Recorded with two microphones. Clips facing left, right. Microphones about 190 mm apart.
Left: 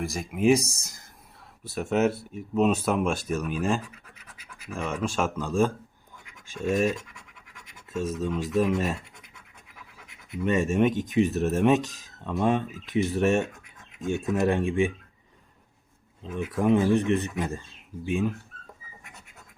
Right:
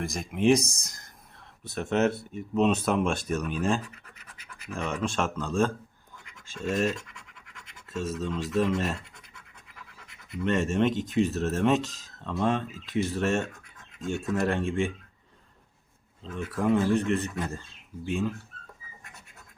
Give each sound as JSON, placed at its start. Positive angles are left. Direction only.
{"t": 0.0, "sound": "speech", "side_deg": 5}
{"t": 7.9, "sound": "speech", "side_deg": 15}
{"t": 8.4, "sound": "speech", "side_deg": 0}
{"t": 10.1, "sound": "scratch", "side_deg": 0}
{"t": 10.7, "sound": "speech", "side_deg": 15}
{"t": 16.2, "sound": "speech", "side_deg": 15}